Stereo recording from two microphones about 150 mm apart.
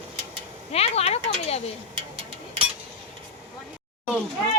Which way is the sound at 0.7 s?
45° left (ahead or behind).